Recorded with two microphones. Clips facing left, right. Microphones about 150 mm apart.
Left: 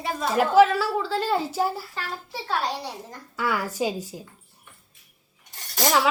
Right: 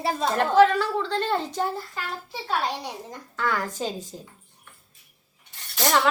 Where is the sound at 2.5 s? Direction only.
15° right (ahead or behind).